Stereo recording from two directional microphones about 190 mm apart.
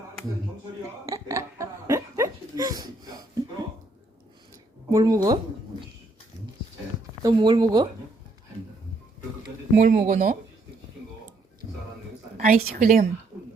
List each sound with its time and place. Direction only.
1.0 s laughter: 15° right (ahead or behind)
4.9 s speech: 20° right (ahead or behind)
7.2 s speech: 20° right (ahead or behind)
9.7 s speech: 40° right (ahead or behind)
12.4 s a woman's voice: 40° right (ahead or behind)